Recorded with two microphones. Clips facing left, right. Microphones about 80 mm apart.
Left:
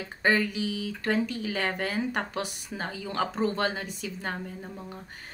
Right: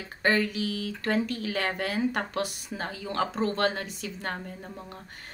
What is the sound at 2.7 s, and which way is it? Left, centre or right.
A woman's voice, centre.